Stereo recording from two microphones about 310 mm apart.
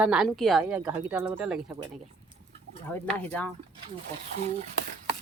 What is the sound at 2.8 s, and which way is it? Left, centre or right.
Speech, centre.